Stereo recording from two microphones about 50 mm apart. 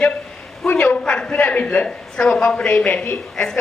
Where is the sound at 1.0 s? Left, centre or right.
Centre.